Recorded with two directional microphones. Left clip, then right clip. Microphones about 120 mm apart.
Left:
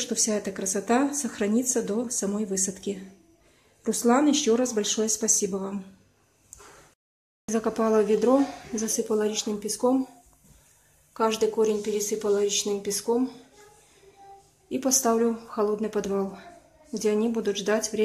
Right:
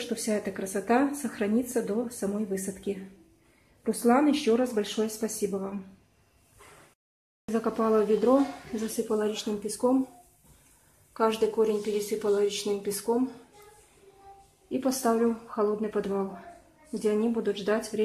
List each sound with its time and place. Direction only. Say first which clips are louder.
0.3 s speech: left 2 dB; 15° left (ahead or behind)
7.4 s speech: left 2 dB; 20° left (ahead or behind)
11.1 s speech: left 1 dB; 20° left (ahead or behind)
14.7 s speech: left 3 dB; 20° left (ahead or behind)